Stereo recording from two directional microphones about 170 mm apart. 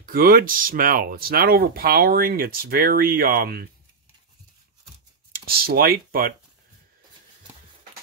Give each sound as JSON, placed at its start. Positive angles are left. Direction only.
{"t": 0.0, "sound": "speech", "side_deg": -60}
{"t": 5.3, "sound": "speech", "side_deg": -60}